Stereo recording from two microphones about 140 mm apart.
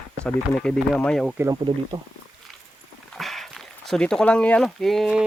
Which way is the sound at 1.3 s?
20° right (ahead or behind).